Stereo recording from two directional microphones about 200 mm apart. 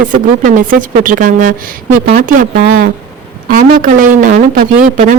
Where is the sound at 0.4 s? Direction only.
40° right (ahead or behind).